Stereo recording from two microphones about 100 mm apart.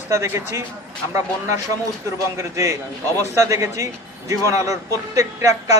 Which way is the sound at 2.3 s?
30° right (ahead or behind).